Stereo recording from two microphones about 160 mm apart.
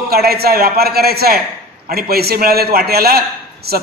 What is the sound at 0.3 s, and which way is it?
A man's voice, 75° right (ahead or behind).